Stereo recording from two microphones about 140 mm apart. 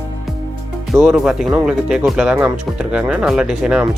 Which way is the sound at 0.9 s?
5° right (ahead or behind).